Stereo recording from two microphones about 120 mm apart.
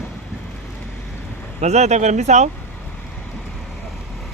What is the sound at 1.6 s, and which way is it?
Speech, 70° right (ahead or behind).